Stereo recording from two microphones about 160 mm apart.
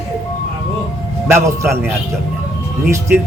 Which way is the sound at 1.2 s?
15° right (ahead or behind).